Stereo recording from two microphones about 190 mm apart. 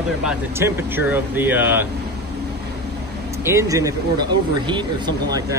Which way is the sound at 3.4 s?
15° right (ahead or behind).